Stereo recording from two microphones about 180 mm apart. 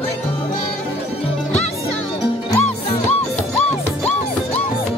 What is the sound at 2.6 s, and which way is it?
Music, 35° left (ahead or behind).